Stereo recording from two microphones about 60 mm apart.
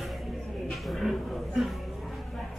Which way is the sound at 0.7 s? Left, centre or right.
Centre.